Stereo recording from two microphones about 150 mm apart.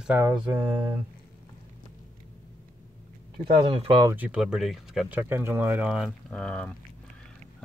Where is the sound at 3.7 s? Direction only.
35° right (ahead or behind).